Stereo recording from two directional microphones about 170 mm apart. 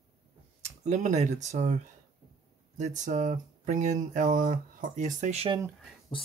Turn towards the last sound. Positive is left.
turn(degrees=-40)  # may be behind; listen again after turning